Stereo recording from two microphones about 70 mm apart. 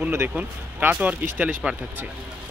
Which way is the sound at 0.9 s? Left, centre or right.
Right.